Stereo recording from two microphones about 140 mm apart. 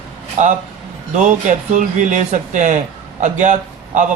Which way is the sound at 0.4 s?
60° right (ahead or behind).